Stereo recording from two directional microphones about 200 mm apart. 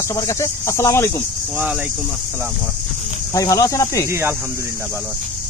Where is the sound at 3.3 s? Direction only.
15° left (ahead or behind).